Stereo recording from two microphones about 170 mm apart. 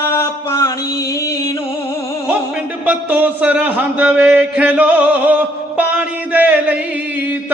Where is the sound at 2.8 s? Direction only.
10° right (ahead or behind).